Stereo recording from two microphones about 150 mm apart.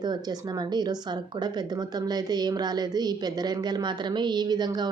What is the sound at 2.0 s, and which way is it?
A woman's voice, 25° right (ahead or behind).